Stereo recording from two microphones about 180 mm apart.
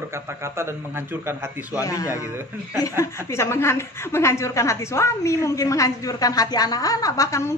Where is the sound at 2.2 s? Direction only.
15° right (ahead or behind).